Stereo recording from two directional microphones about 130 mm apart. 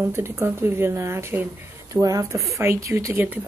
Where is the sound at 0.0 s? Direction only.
20° right (ahead or behind).